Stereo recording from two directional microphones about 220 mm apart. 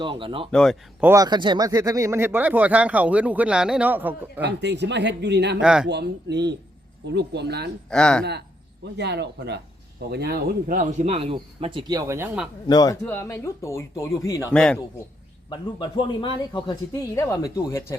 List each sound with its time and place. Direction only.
0.0 s speech: 20° right (ahead or behind)
0.5 s speech: 5° left (ahead or behind)
1.0 s speech: 15° right (ahead or behind)
4.4 s speech: 50° right (ahead or behind)
5.5 s speech: 5° right (ahead or behind)
5.9 s speech: 50° right (ahead or behind)
7.9 s speech: 5° left (ahead or behind)
8.2 s speech: 50° right (ahead or behind); by 12.5 s 10° right (ahead or behind)
12.6 s speech: 15° left (ahead or behind)
15.4 s speech: 20° left (ahead or behind)